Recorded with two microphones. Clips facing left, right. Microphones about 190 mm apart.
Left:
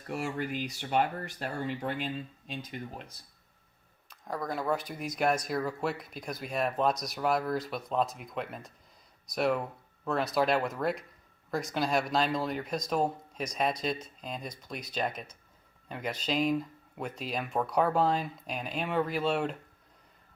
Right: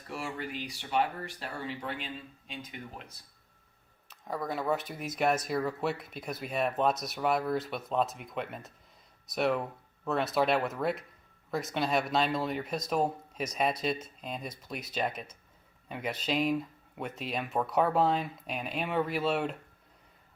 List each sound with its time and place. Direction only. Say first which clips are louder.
0.3 s speech: left 4 dB; 45° left (ahead or behind)
4.1 s speech: even; 5° right (ahead or behind)